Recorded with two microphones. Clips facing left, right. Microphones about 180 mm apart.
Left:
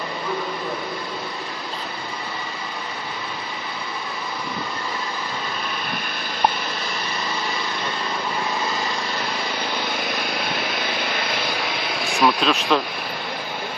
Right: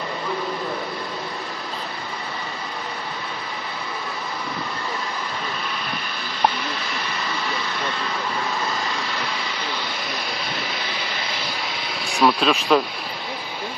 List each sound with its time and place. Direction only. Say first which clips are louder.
9.8 s vehicle: left 3 dB; 55° left (ahead or behind)
12.2 s insect: right 1 dB; centre (ahead or behind)